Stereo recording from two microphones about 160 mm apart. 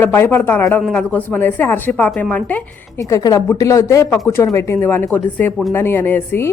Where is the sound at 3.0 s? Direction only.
20° left (ahead or behind).